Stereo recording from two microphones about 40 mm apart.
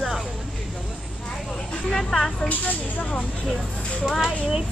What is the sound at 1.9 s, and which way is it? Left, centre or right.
Speech, centre.